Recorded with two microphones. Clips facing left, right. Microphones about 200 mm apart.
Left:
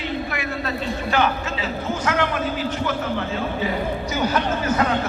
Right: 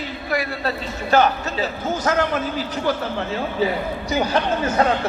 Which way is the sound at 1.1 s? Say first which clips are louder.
Right 5 dB; 40° right (ahead or behind).